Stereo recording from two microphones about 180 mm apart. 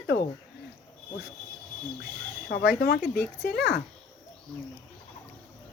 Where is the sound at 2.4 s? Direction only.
55° left (ahead or behind).